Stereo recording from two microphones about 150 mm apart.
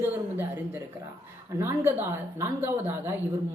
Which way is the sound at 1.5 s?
15° right (ahead or behind).